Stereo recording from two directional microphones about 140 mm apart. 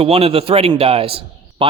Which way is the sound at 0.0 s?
45° right (ahead or behind).